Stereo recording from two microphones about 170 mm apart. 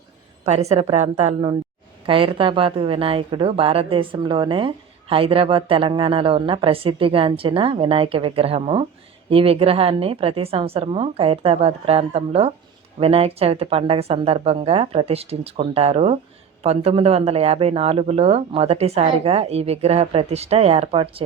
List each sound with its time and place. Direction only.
0.4 s speech: 40° right (ahead or behind)